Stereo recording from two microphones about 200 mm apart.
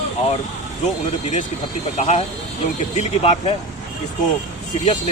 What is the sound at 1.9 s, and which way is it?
Speech, 35° left (ahead or behind).